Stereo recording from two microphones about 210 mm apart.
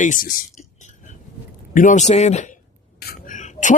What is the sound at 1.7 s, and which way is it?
Speech, 35° left (ahead or behind).